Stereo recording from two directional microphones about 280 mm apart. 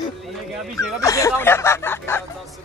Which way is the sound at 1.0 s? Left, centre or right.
Centre.